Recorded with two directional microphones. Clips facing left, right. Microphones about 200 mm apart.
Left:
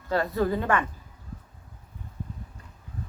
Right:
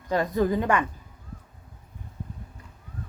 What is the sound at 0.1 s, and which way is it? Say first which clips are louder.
Speech: right 2 dB; 15° right (ahead or behind).